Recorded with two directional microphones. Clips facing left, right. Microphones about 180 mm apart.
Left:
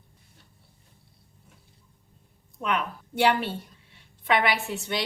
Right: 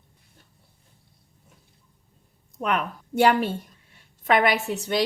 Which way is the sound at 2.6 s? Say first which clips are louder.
Right 2 dB; 45° right (ahead or behind).